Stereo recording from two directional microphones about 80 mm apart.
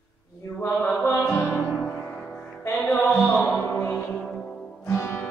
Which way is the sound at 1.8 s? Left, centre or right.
Centre.